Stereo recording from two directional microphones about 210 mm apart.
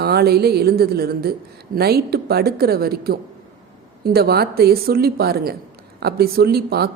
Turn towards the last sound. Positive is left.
turn(degrees=-50)  # may be behind; listen again after turning